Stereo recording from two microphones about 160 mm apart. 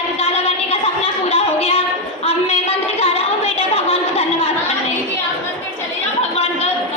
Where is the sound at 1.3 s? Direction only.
40° left (ahead or behind).